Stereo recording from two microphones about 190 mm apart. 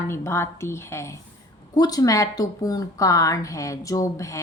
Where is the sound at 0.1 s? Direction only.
15° left (ahead or behind).